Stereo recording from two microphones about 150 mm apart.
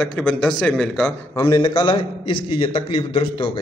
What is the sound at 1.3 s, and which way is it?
A man's voice, 20° left (ahead or behind).